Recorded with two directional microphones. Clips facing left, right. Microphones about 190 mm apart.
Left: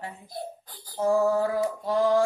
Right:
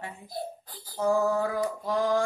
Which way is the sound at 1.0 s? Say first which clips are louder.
Left 2 dB; 30° left (ahead or behind).